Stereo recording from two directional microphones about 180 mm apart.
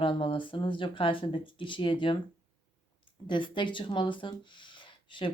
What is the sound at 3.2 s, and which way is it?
Speech, 25° left (ahead or behind).